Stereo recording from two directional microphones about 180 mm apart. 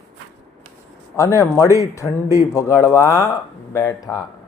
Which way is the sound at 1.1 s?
15° left (ahead or behind).